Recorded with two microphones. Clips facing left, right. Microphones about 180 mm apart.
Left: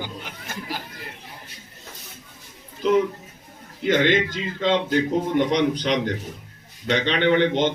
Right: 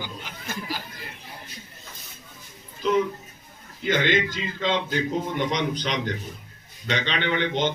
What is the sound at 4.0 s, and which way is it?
A man's voice, 60° left (ahead or behind).